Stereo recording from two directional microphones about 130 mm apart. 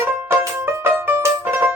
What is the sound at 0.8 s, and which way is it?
Music, 20° right (ahead or behind).